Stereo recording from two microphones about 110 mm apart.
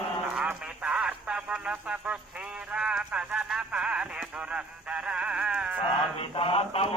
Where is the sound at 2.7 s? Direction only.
5° right (ahead or behind).